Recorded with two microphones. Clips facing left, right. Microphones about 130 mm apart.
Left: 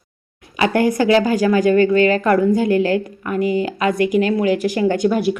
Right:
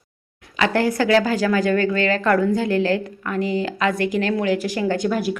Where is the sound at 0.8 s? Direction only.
15° left (ahead or behind).